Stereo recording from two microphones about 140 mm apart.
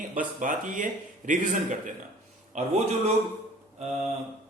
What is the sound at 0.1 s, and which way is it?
Speech, 65° right (ahead or behind).